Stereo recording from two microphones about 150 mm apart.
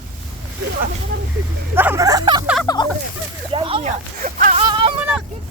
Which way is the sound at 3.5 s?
35° right (ahead or behind).